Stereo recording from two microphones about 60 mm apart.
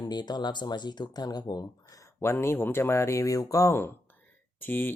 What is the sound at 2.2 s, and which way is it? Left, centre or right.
Speech, left.